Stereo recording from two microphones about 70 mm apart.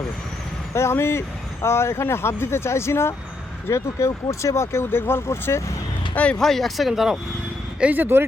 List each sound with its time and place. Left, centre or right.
0.7 s speech: left
6.4 s speech: centre
7.8 s speech: right